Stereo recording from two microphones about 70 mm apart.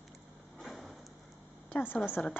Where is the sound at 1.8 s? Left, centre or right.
Left.